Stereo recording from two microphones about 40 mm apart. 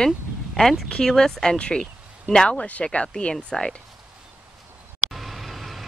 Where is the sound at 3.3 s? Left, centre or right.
Centre.